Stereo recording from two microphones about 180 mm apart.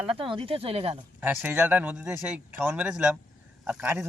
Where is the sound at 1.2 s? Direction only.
10° right (ahead or behind).